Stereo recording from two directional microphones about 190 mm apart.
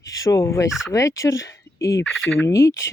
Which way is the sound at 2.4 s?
15° left (ahead or behind).